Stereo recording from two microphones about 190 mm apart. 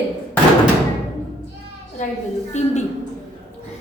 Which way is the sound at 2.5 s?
35° left (ahead or behind).